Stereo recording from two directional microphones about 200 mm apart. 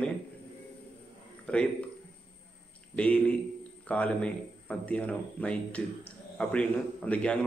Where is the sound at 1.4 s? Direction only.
5° left (ahead or behind).